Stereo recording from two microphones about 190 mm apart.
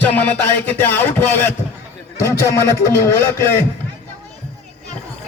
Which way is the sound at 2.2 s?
15° left (ahead or behind).